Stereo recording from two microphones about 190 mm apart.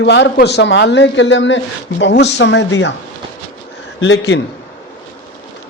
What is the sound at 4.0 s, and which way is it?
Speech, 70° left (ahead or behind).